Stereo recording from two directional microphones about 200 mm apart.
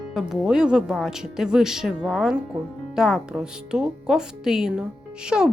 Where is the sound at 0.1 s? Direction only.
Centre (ahead or behind).